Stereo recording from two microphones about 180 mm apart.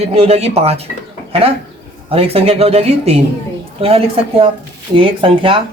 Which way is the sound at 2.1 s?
30° right (ahead or behind).